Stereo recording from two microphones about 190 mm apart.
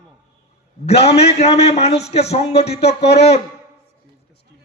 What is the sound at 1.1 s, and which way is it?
A man's voice, 35° left (ahead or behind).